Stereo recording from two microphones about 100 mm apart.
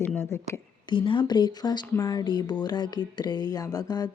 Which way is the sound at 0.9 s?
55° left (ahead or behind).